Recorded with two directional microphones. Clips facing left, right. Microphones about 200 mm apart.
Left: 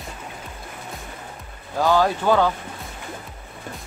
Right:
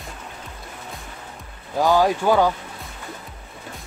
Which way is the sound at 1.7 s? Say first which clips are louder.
Right 1 dB; 10° right (ahead or behind).